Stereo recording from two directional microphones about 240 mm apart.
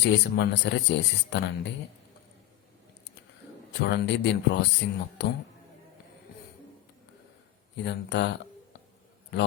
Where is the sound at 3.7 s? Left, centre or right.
Left.